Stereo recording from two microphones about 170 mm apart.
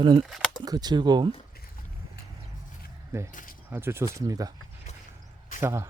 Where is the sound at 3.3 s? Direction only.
50° left (ahead or behind).